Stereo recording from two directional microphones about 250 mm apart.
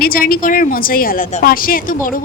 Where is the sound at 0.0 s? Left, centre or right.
Left.